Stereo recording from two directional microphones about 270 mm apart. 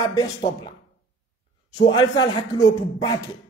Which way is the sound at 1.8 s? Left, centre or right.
Centre.